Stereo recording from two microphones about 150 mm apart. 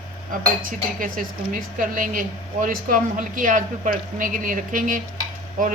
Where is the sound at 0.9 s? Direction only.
65° right (ahead or behind).